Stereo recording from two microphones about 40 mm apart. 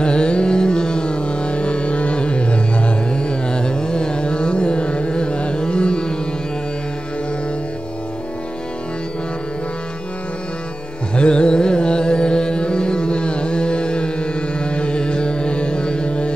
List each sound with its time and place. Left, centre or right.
0.0 s carnatic music: left
11.1 s carnatic music: left